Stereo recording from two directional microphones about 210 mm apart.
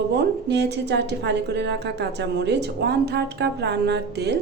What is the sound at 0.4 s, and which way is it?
A woman's voice, 55° right (ahead or behind).